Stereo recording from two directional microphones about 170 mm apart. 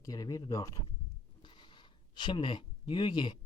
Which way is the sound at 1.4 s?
30° left (ahead or behind).